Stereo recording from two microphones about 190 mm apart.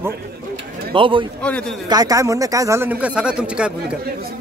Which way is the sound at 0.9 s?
25° right (ahead or behind).